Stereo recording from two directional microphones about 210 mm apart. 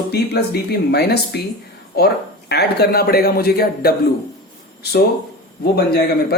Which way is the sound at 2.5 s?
50° left (ahead or behind).